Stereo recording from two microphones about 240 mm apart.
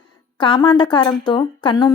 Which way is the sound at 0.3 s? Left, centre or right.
Centre.